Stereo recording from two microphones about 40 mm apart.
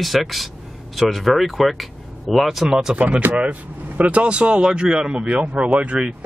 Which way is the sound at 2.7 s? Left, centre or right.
Centre.